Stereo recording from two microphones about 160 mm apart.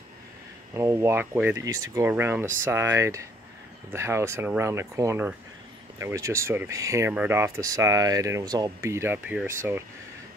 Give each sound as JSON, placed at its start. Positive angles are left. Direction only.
{"t": 0.7, "sound": "speech", "side_deg": -15}